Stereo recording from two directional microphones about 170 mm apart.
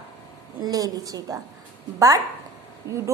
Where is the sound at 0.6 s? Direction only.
20° right (ahead or behind).